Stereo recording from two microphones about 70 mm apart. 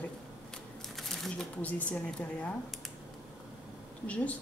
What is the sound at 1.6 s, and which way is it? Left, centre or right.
Speech, left.